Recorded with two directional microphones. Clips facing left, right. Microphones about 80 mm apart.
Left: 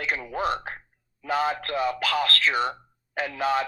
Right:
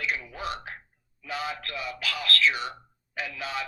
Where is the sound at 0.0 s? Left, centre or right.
Left.